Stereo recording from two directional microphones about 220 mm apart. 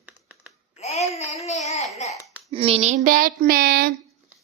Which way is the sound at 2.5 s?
25° right (ahead or behind).